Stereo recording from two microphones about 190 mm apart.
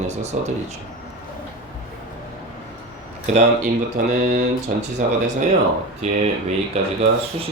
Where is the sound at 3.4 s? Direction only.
45° right (ahead or behind).